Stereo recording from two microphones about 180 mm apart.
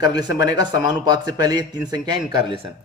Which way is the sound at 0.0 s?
20° right (ahead or behind).